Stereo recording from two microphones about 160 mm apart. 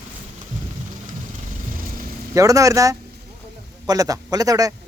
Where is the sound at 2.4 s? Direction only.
20° right (ahead or behind).